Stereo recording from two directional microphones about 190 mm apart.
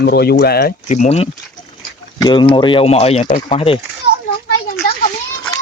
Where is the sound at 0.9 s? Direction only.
35° left (ahead or behind).